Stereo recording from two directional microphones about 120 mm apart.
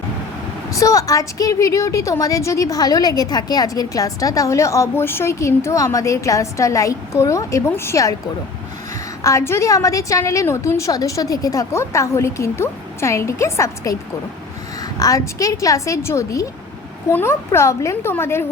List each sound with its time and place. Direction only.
0.7 s a woman's voice: 25° left (ahead or behind)
9.2 s a woman's voice: 25° left (ahead or behind)